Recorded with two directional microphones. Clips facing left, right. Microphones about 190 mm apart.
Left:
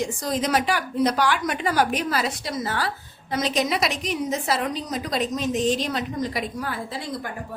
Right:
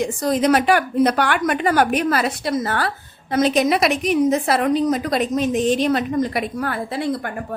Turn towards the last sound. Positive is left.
turn(degrees=-60)  # may be behind; listen again after turning